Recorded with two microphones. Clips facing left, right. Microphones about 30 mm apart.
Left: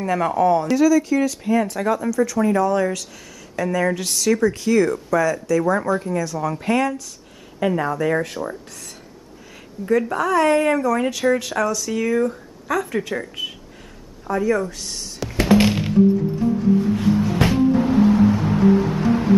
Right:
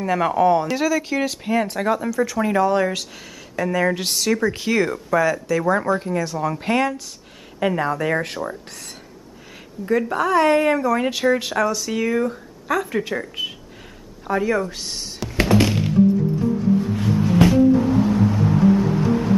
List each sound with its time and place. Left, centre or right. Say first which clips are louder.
0.0 s speech: right 1 dB; centre
3.5 s speech: even; centre
9.8 s speech: even; centre
14.2 s speech: even; right
15.4 s music: left 2 dB; centre
17.4 s music: right 7 dB; left